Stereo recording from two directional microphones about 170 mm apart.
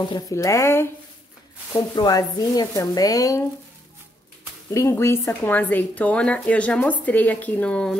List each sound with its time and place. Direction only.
0.0 s speech: 20° left (ahead or behind)
4.6 s speech: 15° left (ahead or behind)